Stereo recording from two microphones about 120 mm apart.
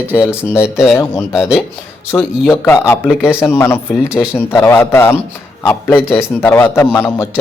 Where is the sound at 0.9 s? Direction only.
20° left (ahead or behind).